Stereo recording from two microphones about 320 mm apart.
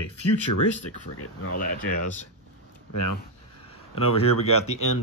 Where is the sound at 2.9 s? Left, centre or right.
Left.